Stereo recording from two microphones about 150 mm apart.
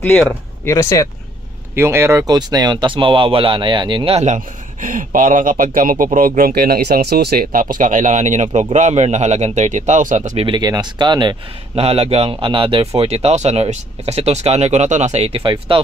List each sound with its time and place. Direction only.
0.7 s speech: 20° left (ahead or behind)
1.8 s speech: 15° right (ahead or behind); by 4.4 s 45° right (ahead or behind)
4.8 s speech: 65° right (ahead or behind)
10.4 s speech: 30° right (ahead or behind)